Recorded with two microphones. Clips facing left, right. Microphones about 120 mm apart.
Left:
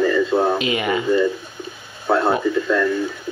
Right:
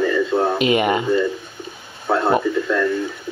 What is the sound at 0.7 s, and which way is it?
Speech, 50° right (ahead or behind).